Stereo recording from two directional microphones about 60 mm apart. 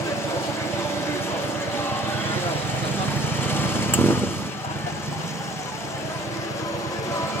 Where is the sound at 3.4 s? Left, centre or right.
Left.